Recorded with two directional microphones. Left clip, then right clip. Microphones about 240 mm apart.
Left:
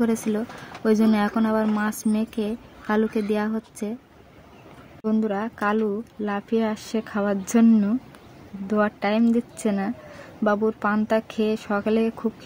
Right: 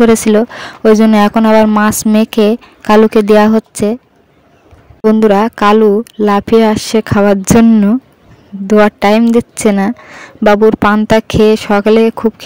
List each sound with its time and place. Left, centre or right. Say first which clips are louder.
0.0 s speech: right 17 dB; right
5.0 s speech: right 18 dB; right